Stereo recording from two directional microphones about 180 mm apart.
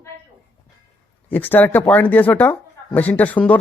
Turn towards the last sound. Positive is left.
turn(degrees=10)  # may be behind; listen again after turning